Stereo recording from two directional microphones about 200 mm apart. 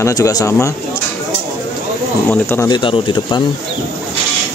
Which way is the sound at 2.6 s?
25° left (ahead or behind).